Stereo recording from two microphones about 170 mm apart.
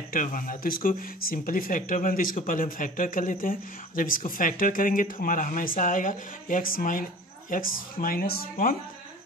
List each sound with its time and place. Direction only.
0.1 s speech: 50° left (ahead or behind)